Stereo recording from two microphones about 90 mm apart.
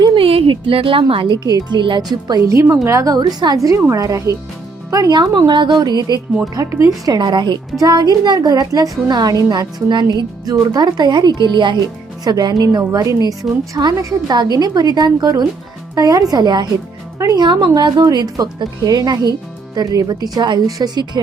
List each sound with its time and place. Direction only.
0.2 s a woman's voice: 85° right; by 1.4 s 70° right (ahead or behind)
1.5 s a woman's voice: 45° right (ahead or behind)
2.4 s a woman's voice: 35° right (ahead or behind)
3.2 s a woman's voice: 50° right (ahead or behind)
6.5 s a woman's voice: 40° right (ahead or behind); by 11.8 s 60° right (ahead or behind)
12.2 s a woman's voice: 50° right (ahead or behind)
13.7 s a woman's voice: 55° right (ahead or behind)
17.2 s a woman's voice: 40° right (ahead or behind)
17.4 s a woman's voice: 60° right (ahead or behind)